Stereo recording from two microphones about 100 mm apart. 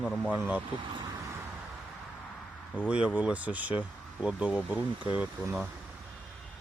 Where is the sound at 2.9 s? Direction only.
10° right (ahead or behind).